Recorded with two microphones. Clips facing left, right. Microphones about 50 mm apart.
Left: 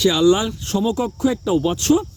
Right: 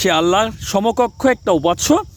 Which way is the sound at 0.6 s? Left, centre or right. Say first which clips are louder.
Right 5 dB; right.